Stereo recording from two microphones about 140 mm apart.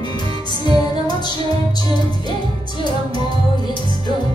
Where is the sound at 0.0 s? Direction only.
30° left (ahead or behind).